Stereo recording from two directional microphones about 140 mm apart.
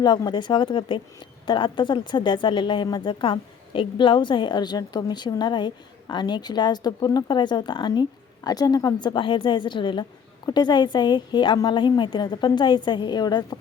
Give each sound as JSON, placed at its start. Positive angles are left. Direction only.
{"t": 0.0, "sound": "a woman's voice", "side_deg": 30}